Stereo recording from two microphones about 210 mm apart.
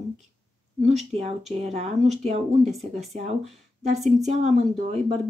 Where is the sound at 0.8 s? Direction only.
30° right (ahead or behind).